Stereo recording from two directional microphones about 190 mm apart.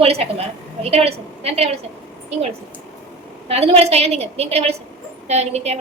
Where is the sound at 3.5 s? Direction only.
30° right (ahead or behind).